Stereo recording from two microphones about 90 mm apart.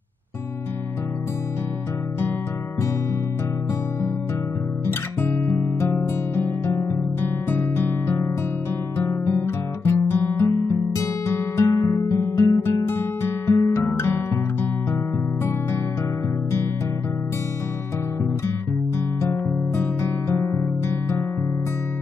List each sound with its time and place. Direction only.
4.8 s guitar: 25° left (ahead or behind)
7.2 s music: 25° left (ahead or behind)
8.9 s guitar: 25° left (ahead or behind)
11.0 s music: 30° left (ahead or behind)
19.2 s music: 25° left (ahead or behind)